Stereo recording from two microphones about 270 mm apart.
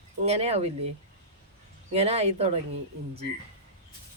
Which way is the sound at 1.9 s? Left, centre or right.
Right.